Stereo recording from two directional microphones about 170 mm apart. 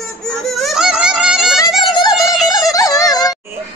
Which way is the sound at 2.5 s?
20° left (ahead or behind).